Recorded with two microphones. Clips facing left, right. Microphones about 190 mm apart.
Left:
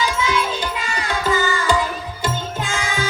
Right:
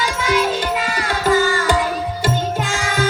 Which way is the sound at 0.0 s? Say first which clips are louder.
Right 2 dB; 50° right (ahead or behind).